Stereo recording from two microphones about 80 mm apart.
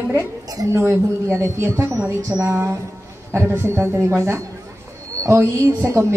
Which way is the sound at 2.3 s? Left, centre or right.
Right.